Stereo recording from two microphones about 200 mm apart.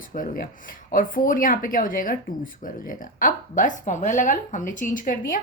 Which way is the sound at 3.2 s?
40° left (ahead or behind).